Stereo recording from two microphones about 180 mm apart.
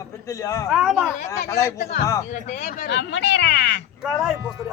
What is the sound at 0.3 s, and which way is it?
Speech, 15° left (ahead or behind).